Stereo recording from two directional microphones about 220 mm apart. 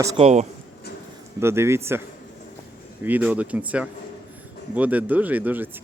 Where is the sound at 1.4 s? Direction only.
10° right (ahead or behind).